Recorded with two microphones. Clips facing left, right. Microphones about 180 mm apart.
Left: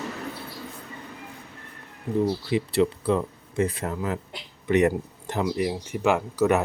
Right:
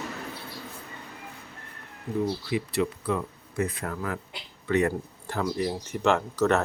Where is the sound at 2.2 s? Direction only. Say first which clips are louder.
Left 3 dB; 30° left (ahead or behind).